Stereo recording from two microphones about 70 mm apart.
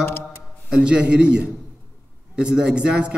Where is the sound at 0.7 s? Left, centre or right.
Centre.